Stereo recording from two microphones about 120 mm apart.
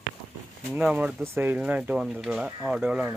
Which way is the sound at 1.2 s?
15° right (ahead or behind).